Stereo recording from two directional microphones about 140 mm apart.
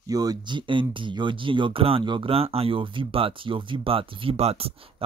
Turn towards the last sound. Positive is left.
turn(degrees=-45)  # may be behind; listen again after turning